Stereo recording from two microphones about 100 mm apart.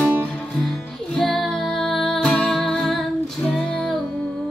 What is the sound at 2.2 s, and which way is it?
Music, 15° left (ahead or behind).